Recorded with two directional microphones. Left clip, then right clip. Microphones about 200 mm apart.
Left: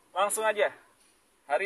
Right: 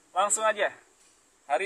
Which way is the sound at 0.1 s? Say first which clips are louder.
Right 2 dB; 5° left (ahead or behind).